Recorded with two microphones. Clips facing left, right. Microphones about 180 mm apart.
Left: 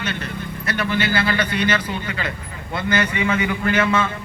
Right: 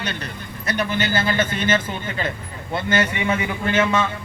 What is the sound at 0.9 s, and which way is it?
Speech, 45° right (ahead or behind).